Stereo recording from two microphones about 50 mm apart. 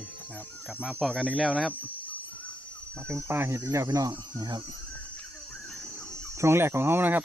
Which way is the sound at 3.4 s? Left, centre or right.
Right.